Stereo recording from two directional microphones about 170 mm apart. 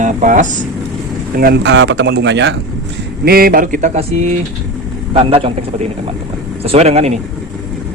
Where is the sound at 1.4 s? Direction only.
75° right (ahead or behind).